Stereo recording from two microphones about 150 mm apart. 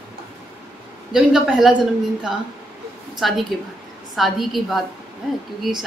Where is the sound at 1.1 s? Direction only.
5° right (ahead or behind).